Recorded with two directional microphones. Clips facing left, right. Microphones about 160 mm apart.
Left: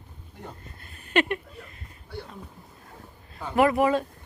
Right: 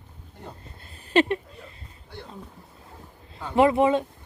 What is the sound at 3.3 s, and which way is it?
Speech, 25° right (ahead or behind).